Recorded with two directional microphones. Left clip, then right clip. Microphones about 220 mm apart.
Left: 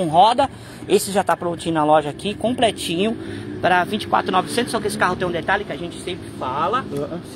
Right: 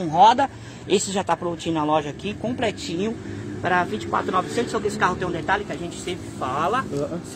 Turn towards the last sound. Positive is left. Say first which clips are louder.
# left 2 dB
turn(degrees=0)  # may be behind; listen again after turning